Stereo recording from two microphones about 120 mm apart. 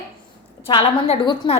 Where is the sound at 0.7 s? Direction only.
55° left (ahead or behind).